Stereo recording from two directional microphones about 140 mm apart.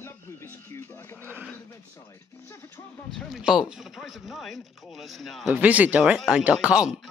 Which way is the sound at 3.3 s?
5° right (ahead or behind).